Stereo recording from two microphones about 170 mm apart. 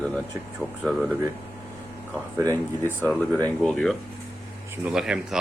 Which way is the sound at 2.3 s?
20° right (ahead or behind).